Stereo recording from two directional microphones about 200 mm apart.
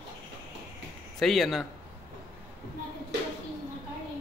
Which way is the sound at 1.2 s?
Centre (ahead or behind).